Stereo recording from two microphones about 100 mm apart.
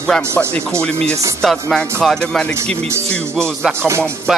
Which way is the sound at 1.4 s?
Centre (ahead or behind).